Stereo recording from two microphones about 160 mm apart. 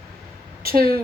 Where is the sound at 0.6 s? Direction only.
70° right (ahead or behind).